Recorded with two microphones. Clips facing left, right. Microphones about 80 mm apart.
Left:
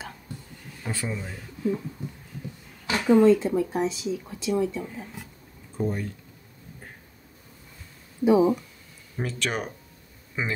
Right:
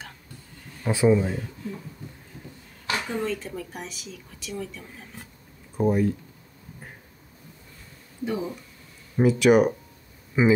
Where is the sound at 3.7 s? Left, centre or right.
Left.